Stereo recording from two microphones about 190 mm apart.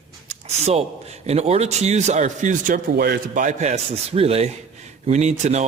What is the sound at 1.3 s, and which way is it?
Speech, 35° right (ahead or behind).